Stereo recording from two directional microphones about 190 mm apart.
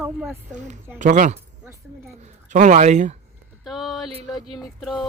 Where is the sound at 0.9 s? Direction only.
45° right (ahead or behind).